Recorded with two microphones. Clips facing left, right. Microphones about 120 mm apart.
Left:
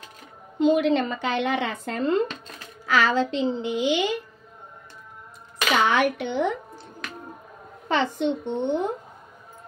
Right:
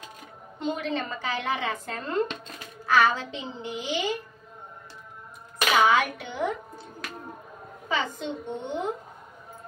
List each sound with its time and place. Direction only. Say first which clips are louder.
0.6 s a woman's voice: left 10 dB; 90° left
5.8 s speech: even; 70° left (ahead or behind)
7.9 s a woman's voice: left 6 dB; 70° left (ahead or behind)